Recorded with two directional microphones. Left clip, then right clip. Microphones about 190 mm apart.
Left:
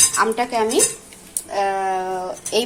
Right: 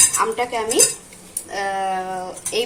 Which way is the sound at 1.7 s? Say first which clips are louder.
Left 1 dB; 35° left (ahead or behind).